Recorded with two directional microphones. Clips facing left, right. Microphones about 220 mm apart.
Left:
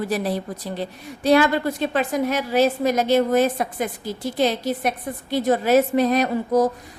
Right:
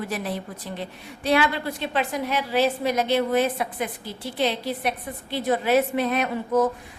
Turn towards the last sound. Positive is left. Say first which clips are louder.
# left 3 dB
turn(degrees=40)  # may be behind; listen again after turning